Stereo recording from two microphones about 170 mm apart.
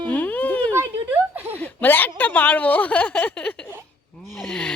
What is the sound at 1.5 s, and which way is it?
A woman's voice, 10° left (ahead or behind).